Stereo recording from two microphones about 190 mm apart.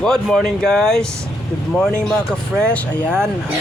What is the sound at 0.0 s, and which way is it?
Speech, 5° left (ahead or behind).